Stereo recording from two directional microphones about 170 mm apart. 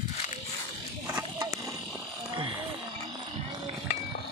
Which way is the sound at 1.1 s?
15° right (ahead or behind).